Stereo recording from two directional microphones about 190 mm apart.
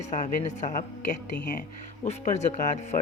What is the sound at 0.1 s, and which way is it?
Speech, 40° left (ahead or behind).